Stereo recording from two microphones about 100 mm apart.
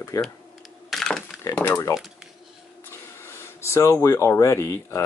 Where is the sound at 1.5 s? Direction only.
20° left (ahead or behind).